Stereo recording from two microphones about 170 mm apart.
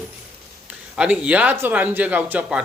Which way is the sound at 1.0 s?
5° right (ahead or behind).